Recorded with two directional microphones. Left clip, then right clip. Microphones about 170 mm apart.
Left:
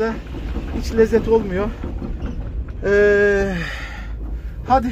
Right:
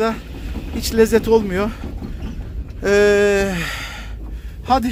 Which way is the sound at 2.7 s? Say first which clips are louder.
Right 1 dB; 30° right (ahead or behind).